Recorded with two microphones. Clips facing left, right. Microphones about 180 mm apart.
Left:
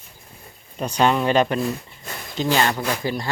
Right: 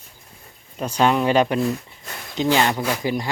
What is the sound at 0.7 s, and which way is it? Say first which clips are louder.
Speech: even; 5° right (ahead or behind).